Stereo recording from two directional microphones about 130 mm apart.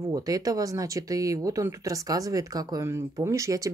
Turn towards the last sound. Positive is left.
turn(degrees=-25)  # may be behind; listen again after turning